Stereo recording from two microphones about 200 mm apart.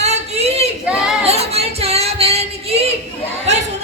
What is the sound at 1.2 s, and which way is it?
Female singing, 30° right (ahead or behind).